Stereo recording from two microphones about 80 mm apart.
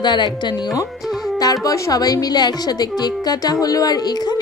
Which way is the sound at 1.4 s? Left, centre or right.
Left.